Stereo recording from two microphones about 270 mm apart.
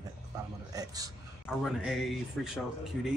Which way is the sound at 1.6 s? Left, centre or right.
Centre.